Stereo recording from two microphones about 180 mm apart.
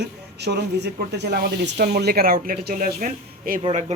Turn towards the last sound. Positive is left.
turn(degrees=-50)  # may be behind; listen again after turning